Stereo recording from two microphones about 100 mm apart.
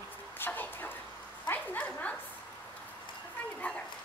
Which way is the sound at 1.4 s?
15° left (ahead or behind).